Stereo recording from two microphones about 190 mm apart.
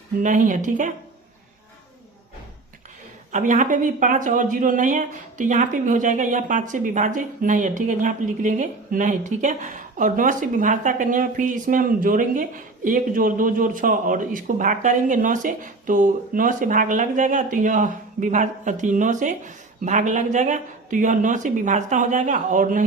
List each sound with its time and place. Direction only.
0.2 s speech: 45° right (ahead or behind)
3.3 s speech: 40° right (ahead or behind)